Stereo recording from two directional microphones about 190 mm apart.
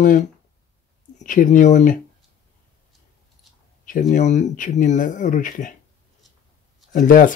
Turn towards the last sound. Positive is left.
turn(degrees=45)  # may be behind; listen again after turning